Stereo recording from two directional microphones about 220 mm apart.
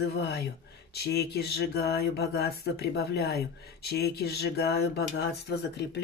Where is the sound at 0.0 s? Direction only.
50° left (ahead or behind).